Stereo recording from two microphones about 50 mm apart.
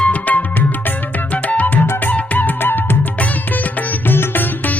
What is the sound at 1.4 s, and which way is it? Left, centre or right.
Music, left.